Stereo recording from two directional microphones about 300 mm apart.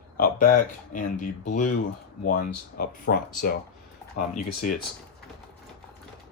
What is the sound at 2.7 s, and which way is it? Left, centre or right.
Speech, left.